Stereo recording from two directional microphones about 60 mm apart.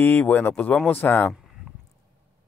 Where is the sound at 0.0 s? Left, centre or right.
Left.